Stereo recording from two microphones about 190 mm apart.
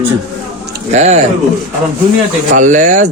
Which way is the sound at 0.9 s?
35° right (ahead or behind).